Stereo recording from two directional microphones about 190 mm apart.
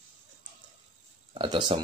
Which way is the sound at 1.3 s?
25° right (ahead or behind).